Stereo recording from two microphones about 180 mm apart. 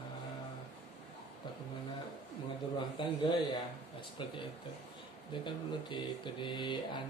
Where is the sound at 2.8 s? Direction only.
25° left (ahead or behind).